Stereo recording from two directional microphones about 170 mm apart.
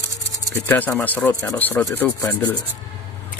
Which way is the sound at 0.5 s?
10° left (ahead or behind).